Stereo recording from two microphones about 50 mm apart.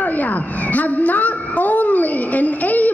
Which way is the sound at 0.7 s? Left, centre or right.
Left.